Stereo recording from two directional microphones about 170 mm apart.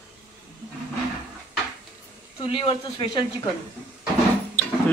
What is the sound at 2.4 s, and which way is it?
Speech, 30° left (ahead or behind).